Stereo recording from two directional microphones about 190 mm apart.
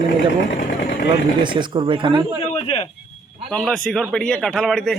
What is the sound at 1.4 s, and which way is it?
Speech, 25° right (ahead or behind).